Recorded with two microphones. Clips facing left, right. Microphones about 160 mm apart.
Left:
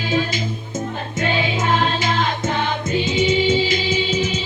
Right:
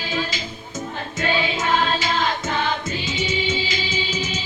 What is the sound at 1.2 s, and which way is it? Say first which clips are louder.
Music: left 2 dB; 50° left (ahead or behind).